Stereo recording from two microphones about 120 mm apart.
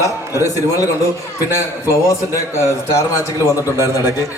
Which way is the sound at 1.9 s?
25° left (ahead or behind).